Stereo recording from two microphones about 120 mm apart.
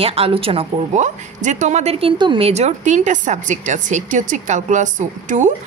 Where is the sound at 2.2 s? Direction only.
50° right (ahead or behind).